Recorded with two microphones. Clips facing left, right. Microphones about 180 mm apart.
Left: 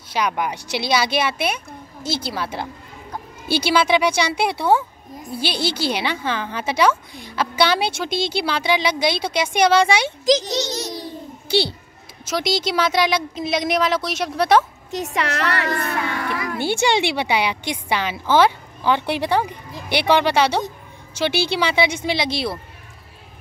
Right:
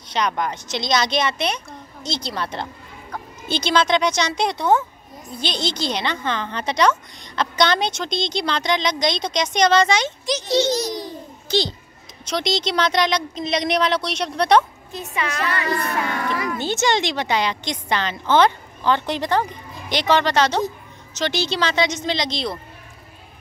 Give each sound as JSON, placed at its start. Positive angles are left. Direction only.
{"t": 0.1, "sound": "a woman's voice", "side_deg": 10}
{"t": 11.5, "sound": "a child's voice", "side_deg": 10}
{"t": 14.9, "sound": "a woman's voice", "side_deg": 85}
{"t": 16.5, "sound": "a woman's voice", "side_deg": 10}